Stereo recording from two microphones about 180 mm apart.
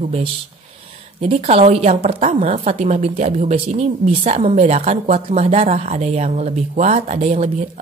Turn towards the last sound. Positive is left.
turn(degrees=-35)  # may be behind; listen again after turning